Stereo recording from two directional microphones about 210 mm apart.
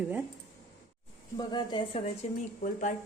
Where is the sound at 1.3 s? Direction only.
20° left (ahead or behind).